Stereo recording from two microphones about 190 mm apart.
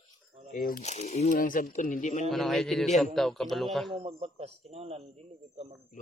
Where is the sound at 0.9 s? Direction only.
35° left (ahead or behind).